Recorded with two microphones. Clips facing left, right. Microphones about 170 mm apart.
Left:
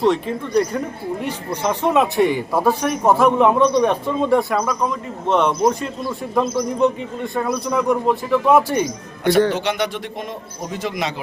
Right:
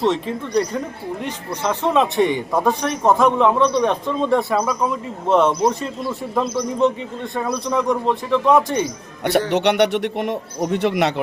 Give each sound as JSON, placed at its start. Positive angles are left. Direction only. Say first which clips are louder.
{"t": 0.0, "sound": "a man's voice", "louder": "left 2 dB", "side_deg": 0}
{"t": 1.2, "sound": "a man's voice", "louder": "left 1 dB", "side_deg": 10}
{"t": 9.5, "sound": "speech", "louder": "right 5 dB", "side_deg": -70}